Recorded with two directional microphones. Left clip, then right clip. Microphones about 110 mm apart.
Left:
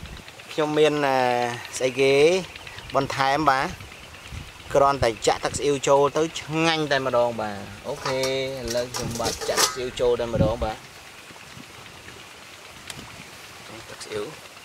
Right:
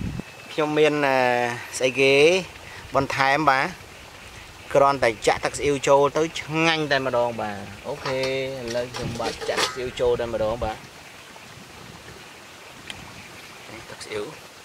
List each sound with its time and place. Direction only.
0.6 s speech: 10° left (ahead or behind)
8.0 s speech: 30° left (ahead or behind)
8.3 s boiling: 20° left (ahead or behind)
8.6 s speech: 30° left (ahead or behind)
9.8 s speech: 10° left (ahead or behind)
14.1 s speech: 5° left (ahead or behind)